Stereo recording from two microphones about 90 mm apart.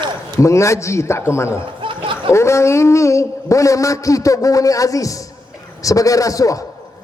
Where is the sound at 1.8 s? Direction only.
70° right (ahead or behind).